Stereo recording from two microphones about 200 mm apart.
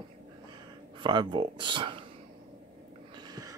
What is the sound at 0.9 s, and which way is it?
Speech, 25° right (ahead or behind).